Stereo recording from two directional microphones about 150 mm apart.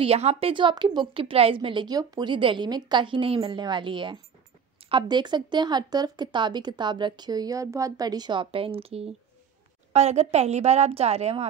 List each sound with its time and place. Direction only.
0.0 s a woman's voice: 45° right (ahead or behind)